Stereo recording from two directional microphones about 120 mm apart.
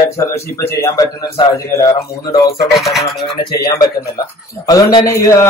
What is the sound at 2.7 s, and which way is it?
Speech, centre (ahead or behind).